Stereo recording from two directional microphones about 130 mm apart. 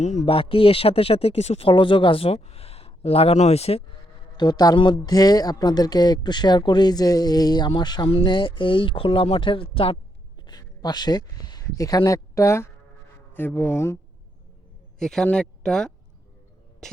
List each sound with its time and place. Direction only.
0.0 s speech: 65° left (ahead or behind)
0.3 s speech: 45° left (ahead or behind)
4.4 s speech: 30° left (ahead or behind)
10.4 s speech: 30° left (ahead or behind)
14.9 s speech: 5° left (ahead or behind)